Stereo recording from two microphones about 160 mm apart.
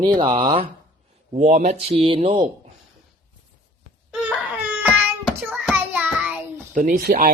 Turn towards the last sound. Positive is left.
turn(degrees=-65)  # may be behind; listen again after turning